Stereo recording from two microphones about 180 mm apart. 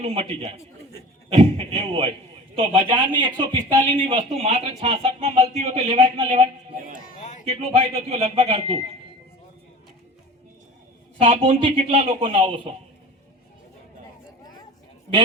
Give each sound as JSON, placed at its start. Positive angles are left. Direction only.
{"t": 0.0, "sound": "speech", "side_deg": -35}
{"t": 7.2, "sound": "a sound", "side_deg": 40}
{"t": 7.4, "sound": "speech", "side_deg": -35}
{"t": 11.2, "sound": "speech", "side_deg": -35}